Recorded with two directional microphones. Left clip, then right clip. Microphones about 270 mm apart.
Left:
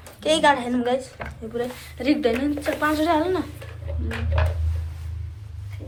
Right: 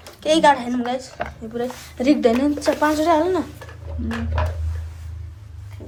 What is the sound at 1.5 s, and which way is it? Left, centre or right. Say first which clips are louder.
A woman's voice: right 3 dB; centre.